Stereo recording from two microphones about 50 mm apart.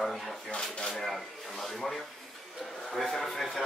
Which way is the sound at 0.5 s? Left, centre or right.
Centre.